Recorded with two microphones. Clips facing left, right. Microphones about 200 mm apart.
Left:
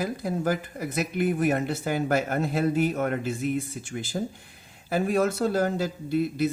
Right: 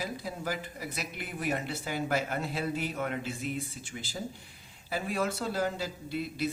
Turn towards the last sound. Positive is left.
turn(degrees=50)  # may be behind; listen again after turning